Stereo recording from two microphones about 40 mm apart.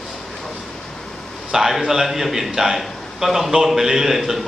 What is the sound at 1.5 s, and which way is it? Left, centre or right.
A man's voice, centre.